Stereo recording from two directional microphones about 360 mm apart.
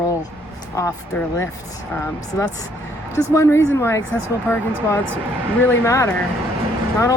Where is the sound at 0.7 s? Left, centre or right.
Centre.